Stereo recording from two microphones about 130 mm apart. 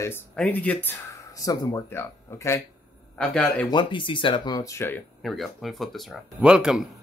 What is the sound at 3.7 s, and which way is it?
Speech, 40° left (ahead or behind).